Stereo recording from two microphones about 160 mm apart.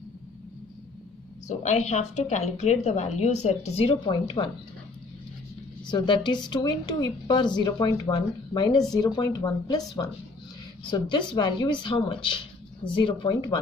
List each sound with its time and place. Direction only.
1.6 s a woman's voice: 45° left (ahead or behind)
5.9 s speech: 30° left (ahead or behind)
10.9 s speech: 30° left (ahead or behind)